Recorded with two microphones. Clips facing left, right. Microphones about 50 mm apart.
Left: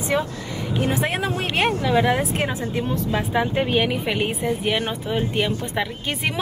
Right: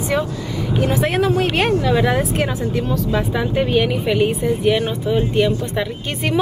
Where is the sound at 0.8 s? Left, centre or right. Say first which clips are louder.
Right 6 dB; left.